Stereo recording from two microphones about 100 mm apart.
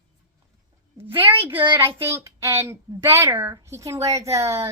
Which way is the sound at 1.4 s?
20° right (ahead or behind).